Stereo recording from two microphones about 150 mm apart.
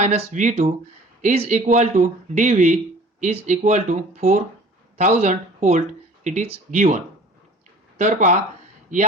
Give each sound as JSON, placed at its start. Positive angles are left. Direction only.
{"t": 0.0, "sound": "speech", "side_deg": -45}